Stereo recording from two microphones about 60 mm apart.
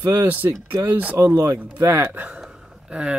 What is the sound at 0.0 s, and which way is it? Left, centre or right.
Speech, right.